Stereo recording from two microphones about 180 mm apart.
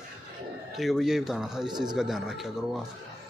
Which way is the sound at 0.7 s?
Centre (ahead or behind).